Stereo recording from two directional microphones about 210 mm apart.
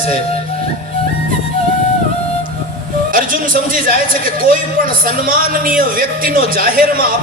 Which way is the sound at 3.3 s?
40° right (ahead or behind).